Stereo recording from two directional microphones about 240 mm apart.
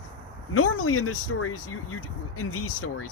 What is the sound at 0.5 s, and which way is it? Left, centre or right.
Speech, left.